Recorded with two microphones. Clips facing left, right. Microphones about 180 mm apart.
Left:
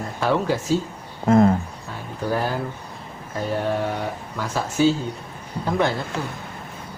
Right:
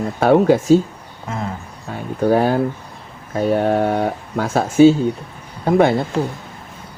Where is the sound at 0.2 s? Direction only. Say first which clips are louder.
Right 9 dB; 55° right (ahead or behind).